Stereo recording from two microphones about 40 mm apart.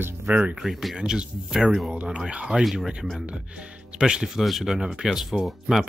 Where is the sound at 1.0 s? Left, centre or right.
Centre.